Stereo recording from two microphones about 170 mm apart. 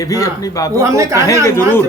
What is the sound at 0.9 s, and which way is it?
Speech, 15° right (ahead or behind).